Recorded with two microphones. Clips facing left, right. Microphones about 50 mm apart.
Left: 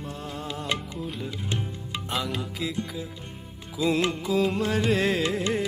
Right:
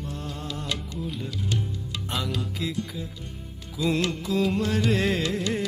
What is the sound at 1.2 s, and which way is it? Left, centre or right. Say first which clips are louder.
Music: right 1 dB; left.